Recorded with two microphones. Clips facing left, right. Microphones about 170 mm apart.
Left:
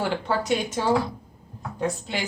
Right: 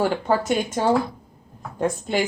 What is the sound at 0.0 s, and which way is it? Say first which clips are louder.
Speech: right 4 dB; 45° right (ahead or behind).